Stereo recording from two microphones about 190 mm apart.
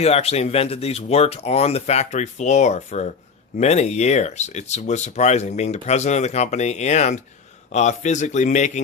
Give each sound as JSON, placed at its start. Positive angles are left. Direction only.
{"t": 0.0, "sound": "speech", "side_deg": 35}